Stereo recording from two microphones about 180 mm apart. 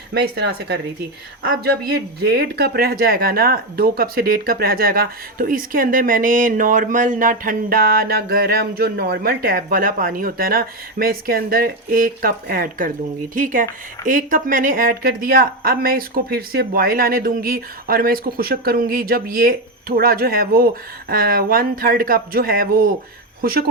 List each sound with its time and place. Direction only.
0.1 s speech: 65° right (ahead or behind)
2.2 s speech: 60° right (ahead or behind)